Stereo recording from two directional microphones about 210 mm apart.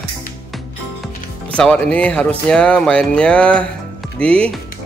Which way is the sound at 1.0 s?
5° left (ahead or behind).